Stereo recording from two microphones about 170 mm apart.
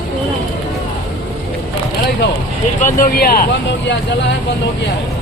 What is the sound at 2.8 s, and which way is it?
Speech, 55° left (ahead or behind).